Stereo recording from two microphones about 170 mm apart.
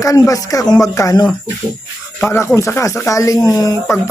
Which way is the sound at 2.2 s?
15° left (ahead or behind).